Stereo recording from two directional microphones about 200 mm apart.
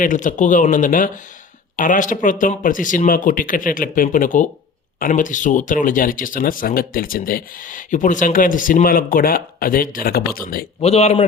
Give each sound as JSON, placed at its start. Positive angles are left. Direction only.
{"t": 0.0, "sound": "speech", "side_deg": 40}
{"t": 10.8, "sound": "speech", "side_deg": 30}